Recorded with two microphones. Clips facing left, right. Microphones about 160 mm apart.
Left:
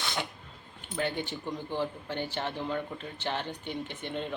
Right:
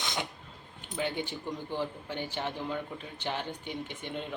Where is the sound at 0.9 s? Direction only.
15° right (ahead or behind).